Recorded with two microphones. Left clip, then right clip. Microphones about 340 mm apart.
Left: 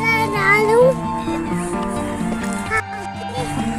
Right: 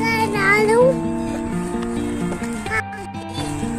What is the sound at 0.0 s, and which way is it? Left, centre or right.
Music, centre.